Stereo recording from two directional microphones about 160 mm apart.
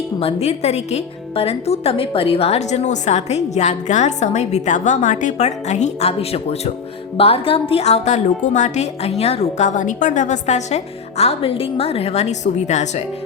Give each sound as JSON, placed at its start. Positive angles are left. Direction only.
{"t": 0.2, "sound": "a woman's voice", "side_deg": 40}